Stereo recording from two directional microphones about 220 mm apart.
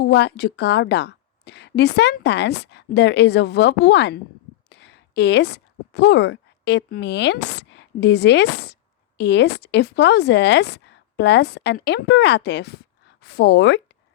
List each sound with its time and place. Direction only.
0.0 s a woman's voice: 50° left (ahead or behind)